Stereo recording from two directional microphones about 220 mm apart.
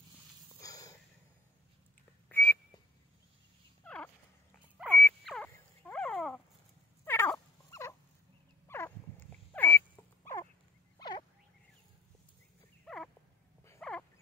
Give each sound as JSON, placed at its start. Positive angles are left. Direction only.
{"t": 0.6, "sound": "sniff", "side_deg": 15}
{"t": 2.2, "sound": "whistling", "side_deg": 10}
{"t": 3.8, "sound": "horse", "side_deg": 5}
{"t": 4.8, "sound": "frog", "side_deg": 10}
{"t": 7.1, "sound": "dog", "side_deg": 10}
{"t": 8.6, "sound": "a sound", "side_deg": 10}
{"t": 11.0, "sound": "frog", "side_deg": 20}
{"t": 12.8, "sound": "a sound", "side_deg": 0}